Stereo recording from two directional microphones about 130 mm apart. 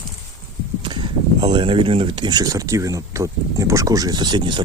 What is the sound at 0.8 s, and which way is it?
Speech, 40° right (ahead or behind).